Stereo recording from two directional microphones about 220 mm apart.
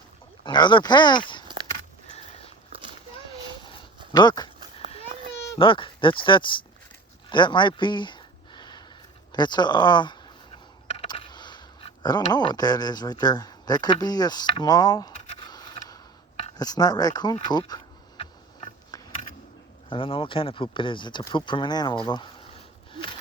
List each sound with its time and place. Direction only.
0.4 s speech: 20° left (ahead or behind)
3.2 s a sound: 20° left (ahead or behind)
4.1 s speech: 20° left (ahead or behind)
5.5 s speech: 25° left (ahead or behind)
7.3 s a sound: 20° left (ahead or behind)
9.3 s speech: 20° left (ahead or behind)
10.8 s a sound: 25° left (ahead or behind)
12.2 s speech: 20° left (ahead or behind)
15.3 s biting: 20° left (ahead or behind)
16.4 s speech: 15° left (ahead or behind)
19.9 s speech: 25° left (ahead or behind)